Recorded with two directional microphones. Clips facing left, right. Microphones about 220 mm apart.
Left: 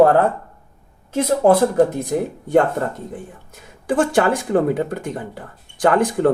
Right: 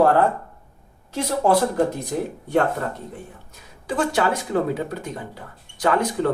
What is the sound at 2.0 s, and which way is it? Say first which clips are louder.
Speech: left 4 dB; 50° left (ahead or behind).